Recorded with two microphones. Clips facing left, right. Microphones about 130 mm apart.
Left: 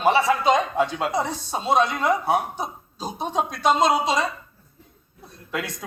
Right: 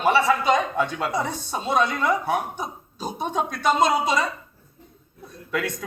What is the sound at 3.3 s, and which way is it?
Speech, 50° right (ahead or behind).